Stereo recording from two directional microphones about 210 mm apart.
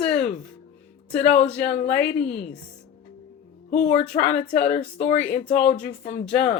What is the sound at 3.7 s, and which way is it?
Speech, 35° left (ahead or behind).